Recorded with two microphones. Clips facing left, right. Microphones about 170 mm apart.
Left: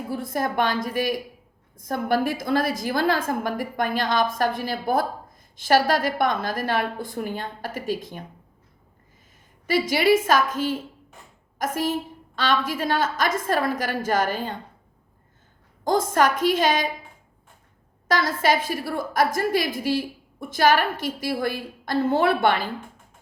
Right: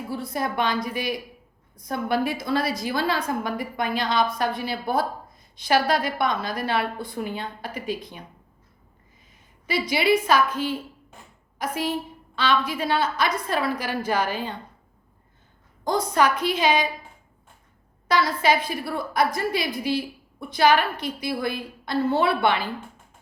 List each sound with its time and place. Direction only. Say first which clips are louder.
0.1 s a woman's voice: left 2 dB; 50° left (ahead or behind)
9.6 s a woman's voice: left 2 dB; 45° left (ahead or behind)
15.8 s a woman's voice: left 1 dB; 50° left (ahead or behind)
18.1 s a woman's voice: even; 45° left (ahead or behind)